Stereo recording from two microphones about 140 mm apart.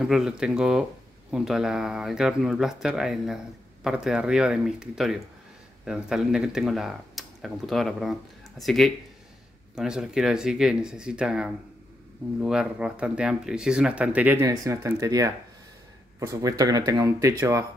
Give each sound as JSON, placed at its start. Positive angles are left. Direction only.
{"t": 0.0, "sound": "speech", "side_deg": -5}